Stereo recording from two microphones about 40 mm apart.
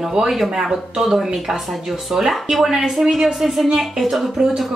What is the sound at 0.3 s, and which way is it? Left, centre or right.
A woman's voice, centre.